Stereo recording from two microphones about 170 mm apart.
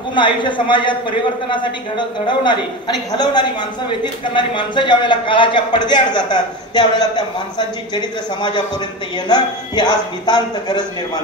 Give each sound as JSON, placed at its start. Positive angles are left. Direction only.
{"t": 0.1, "sound": "speech", "side_deg": 30}
{"t": 4.0, "sound": "speech", "side_deg": 30}